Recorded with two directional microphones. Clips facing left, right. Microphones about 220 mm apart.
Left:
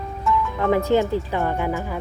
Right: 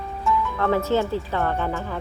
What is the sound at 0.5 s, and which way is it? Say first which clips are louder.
Speech: left 4 dB; 15° left (ahead or behind).